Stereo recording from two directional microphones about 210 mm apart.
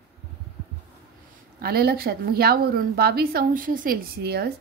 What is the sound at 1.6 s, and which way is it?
A woman's voice, 45° right (ahead or behind).